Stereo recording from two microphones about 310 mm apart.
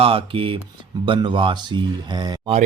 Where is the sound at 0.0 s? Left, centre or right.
Centre.